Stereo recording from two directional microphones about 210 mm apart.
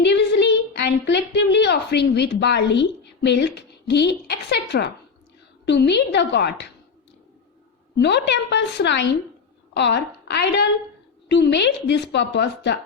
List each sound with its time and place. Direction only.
0.0 s a woman's voice: 55° left (ahead or behind)
7.9 s a woman's voice: 55° left (ahead or behind)